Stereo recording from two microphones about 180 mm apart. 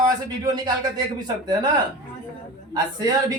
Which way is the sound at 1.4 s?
25° right (ahead or behind).